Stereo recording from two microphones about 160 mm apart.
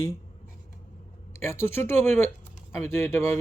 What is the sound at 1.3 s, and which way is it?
Speech, 15° left (ahead or behind).